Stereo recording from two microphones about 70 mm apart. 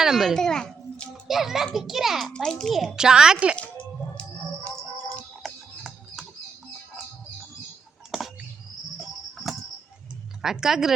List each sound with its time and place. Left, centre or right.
0.0 s a child's voice: centre
1.3 s a child's voice: centre
2.3 s a child's voice: centre
2.9 s a woman's voice: centre
4.2 s music: centre
5.4 s a sound: centre
9.0 s cricket: centre
10.4 s a woman's voice: centre